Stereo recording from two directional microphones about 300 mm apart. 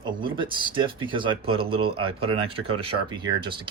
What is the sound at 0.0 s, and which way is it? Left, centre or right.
Speech, centre.